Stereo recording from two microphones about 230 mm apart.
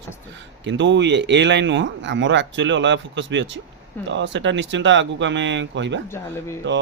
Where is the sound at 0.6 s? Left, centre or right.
Right.